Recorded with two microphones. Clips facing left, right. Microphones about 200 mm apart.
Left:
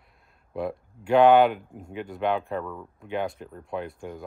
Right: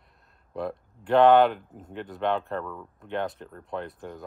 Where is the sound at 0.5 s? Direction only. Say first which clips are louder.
Left 2 dB; centre (ahead or behind).